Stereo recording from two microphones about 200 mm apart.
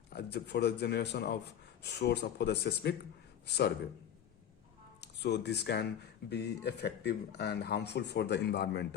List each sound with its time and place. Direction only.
0.1 s speech: 55° left (ahead or behind)
4.9 s speech: 55° left (ahead or behind)